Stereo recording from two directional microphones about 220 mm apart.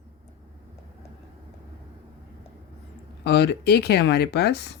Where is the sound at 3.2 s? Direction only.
50° left (ahead or behind).